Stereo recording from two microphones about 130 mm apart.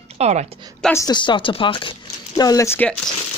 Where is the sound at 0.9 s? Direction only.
35° left (ahead or behind).